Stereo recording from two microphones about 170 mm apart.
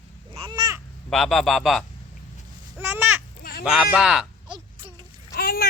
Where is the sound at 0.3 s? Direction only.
30° right (ahead or behind).